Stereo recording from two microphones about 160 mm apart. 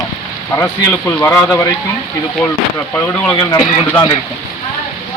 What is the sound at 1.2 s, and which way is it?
Speech, 15° left (ahead or behind).